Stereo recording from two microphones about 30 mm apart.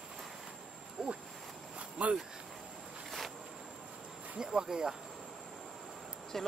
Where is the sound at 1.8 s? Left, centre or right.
Right.